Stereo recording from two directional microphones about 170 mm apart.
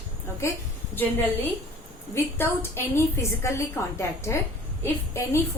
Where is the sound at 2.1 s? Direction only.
15° left (ahead or behind).